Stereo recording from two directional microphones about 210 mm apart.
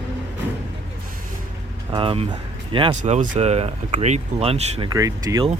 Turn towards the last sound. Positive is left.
turn(degrees=-15)  # may be behind; listen again after turning